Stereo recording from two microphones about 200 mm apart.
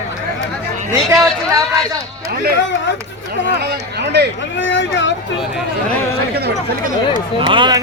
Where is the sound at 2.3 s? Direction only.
50° right (ahead or behind).